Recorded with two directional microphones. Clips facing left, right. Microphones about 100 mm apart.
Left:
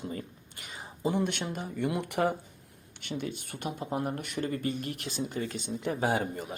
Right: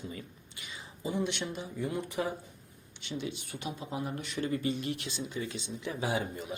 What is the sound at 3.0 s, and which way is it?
Speech, 50° left (ahead or behind).